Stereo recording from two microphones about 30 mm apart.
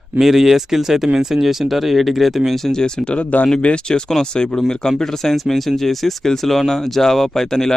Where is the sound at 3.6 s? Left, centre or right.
Left.